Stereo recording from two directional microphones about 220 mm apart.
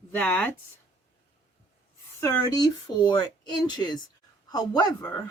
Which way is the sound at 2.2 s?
20° left (ahead or behind).